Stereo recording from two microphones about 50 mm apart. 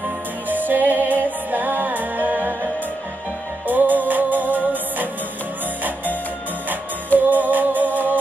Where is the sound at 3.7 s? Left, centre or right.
Right.